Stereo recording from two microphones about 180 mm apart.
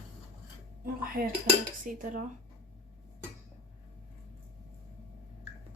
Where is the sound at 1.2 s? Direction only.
50° right (ahead or behind).